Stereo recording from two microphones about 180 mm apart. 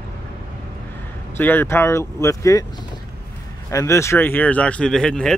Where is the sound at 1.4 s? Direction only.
10° left (ahead or behind).